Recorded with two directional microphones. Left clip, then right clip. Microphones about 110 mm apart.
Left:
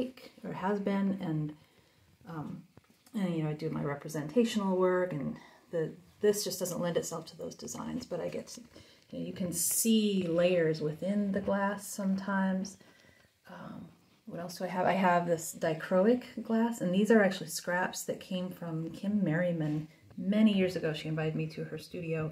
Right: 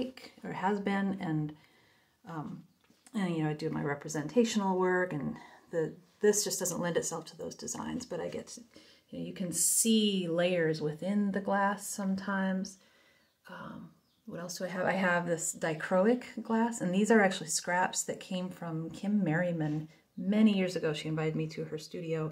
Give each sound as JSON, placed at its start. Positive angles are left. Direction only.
{"t": 0.0, "sound": "speech", "side_deg": -10}
{"t": 13.5, "sound": "speech", "side_deg": -30}
{"t": 14.7, "sound": "speech", "side_deg": -10}